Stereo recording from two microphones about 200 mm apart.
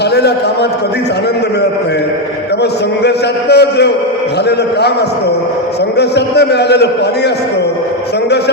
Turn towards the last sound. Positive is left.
turn(degrees=55)  # may be behind; listen again after turning